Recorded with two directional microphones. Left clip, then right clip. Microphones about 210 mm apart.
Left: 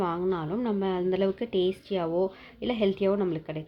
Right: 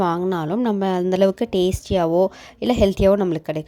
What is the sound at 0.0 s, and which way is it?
A woman's voice, 50° right (ahead or behind).